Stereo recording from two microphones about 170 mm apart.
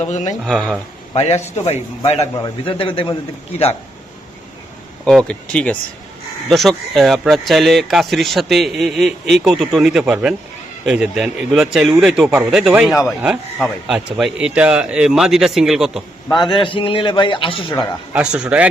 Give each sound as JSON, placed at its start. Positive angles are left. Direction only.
{"t": 0.0, "sound": "speech", "side_deg": 45}
{"t": 0.4, "sound": "a man's voice", "side_deg": 5}
{"t": 1.1, "sound": "a man's voice", "side_deg": 40}
{"t": 2.3, "sound": "a man's voice", "side_deg": 25}
{"t": 5.0, "sound": "a man's voice", "side_deg": 5}
{"t": 16.4, "sound": "speech", "side_deg": 30}
{"t": 17.7, "sound": "speech", "side_deg": -5}